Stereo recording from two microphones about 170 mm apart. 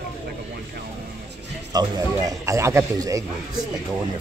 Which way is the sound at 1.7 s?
20° right (ahead or behind).